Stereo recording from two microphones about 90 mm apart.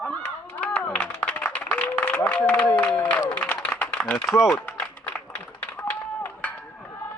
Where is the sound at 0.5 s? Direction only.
15° left (ahead or behind).